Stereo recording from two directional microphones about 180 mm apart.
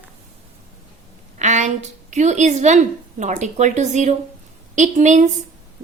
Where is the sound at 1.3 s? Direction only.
40° right (ahead or behind).